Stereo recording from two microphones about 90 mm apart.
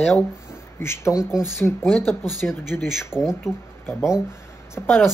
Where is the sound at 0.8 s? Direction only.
30° left (ahead or behind); by 2.9 s 15° left (ahead or behind).